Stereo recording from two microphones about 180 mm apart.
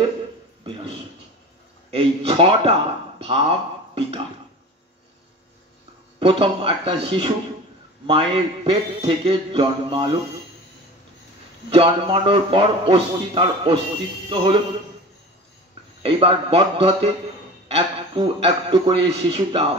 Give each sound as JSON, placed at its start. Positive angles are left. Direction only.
{"t": 1.9, "sound": "a man's voice", "side_deg": -30}
{"t": 6.1, "sound": "a man's voice", "side_deg": -30}
{"t": 11.7, "sound": "a man's voice", "side_deg": -30}
{"t": 16.0, "sound": "a man's voice", "side_deg": -30}